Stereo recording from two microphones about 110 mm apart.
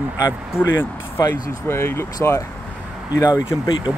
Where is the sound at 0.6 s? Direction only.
20° left (ahead or behind).